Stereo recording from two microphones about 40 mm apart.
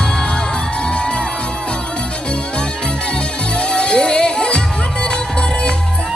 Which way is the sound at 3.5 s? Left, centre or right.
Left.